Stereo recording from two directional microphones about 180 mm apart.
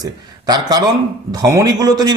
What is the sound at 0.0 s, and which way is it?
A man's voice, 20° right (ahead or behind).